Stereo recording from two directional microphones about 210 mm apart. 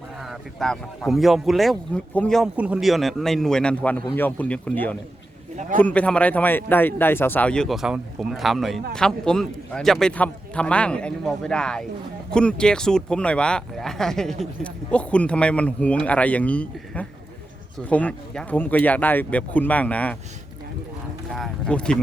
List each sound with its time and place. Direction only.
0.3 s speech: centre (ahead or behind)
5.5 s a man's voice: 35° right (ahead or behind)
5.8 s speech: 5° left (ahead or behind)
21.2 s speech: centre (ahead or behind)